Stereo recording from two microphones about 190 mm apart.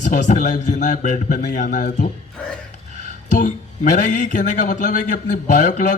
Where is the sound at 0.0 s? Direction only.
40° left (ahead or behind).